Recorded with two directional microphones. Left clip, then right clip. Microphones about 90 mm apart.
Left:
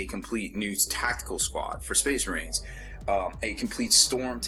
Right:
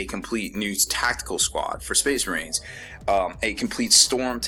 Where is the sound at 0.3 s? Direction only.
20° right (ahead or behind).